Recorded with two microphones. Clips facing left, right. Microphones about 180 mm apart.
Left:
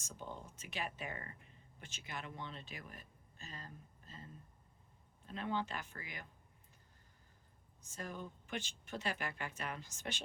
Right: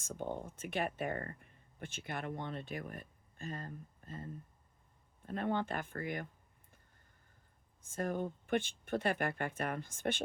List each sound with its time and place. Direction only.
0.0 s speech: 55° right (ahead or behind)
7.8 s speech: 55° right (ahead or behind)